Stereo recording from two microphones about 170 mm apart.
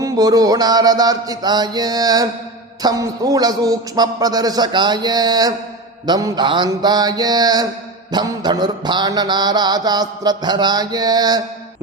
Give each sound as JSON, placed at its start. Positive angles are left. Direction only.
{"t": 0.0, "sound": "mantra", "side_deg": -20}